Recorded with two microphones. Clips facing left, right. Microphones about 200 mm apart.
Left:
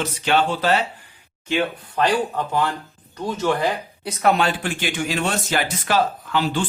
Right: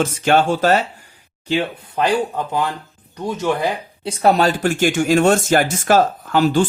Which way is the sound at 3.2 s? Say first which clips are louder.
Right 1 dB; 15° right (ahead or behind).